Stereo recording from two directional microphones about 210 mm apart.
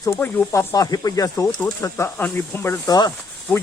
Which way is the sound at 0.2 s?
10° left (ahead or behind).